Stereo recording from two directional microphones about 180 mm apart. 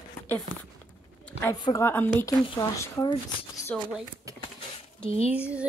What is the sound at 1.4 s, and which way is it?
Speech, 15° left (ahead or behind).